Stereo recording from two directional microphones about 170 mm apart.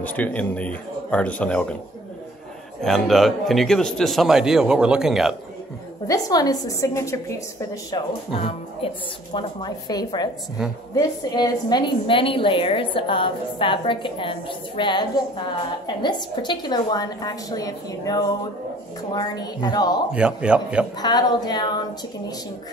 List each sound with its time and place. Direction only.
0.0 s a man's voice: 10° left (ahead or behind)
2.8 s a man's voice: centre (ahead or behind)
6.0 s a woman's voice: 20° left (ahead or behind)
8.3 s a woman's voice: 35° left (ahead or behind)
20.1 s a man's voice: 5° right (ahead or behind)
21.0 s a woman's voice: 25° left (ahead or behind)